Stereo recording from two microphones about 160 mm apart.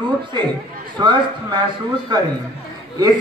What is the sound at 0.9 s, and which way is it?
Speech, 25° right (ahead or behind).